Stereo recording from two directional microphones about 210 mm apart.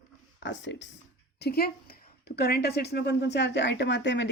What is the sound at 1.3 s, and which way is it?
Speech, 50° left (ahead or behind).